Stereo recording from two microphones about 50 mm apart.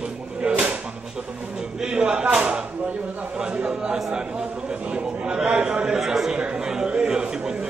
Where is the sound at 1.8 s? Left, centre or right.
Centre.